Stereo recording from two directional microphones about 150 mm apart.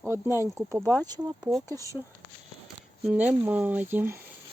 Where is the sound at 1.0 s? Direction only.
25° right (ahead or behind).